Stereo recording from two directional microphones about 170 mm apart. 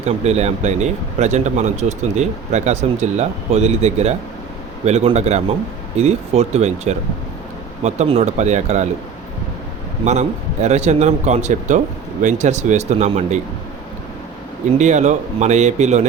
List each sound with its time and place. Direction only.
0.0 s speech: 40° right (ahead or behind)
10.0 s a man's voice: 40° right (ahead or behind)
14.8 s a man's voice: 45° right (ahead or behind)